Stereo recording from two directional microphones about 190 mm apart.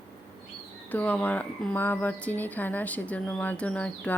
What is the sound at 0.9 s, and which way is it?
A woman's voice, 10° left (ahead or behind).